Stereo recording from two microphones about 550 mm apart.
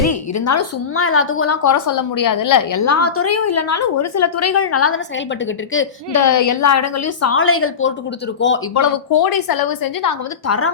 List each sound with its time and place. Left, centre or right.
0.0 s a woman's voice: left
8.8 s a woman's voice: left